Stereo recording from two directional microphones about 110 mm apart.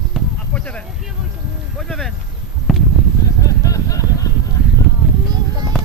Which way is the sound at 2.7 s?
Centre (ahead or behind).